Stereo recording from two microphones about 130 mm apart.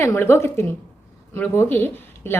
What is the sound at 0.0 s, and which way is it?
A woman's voice, 20° left (ahead or behind).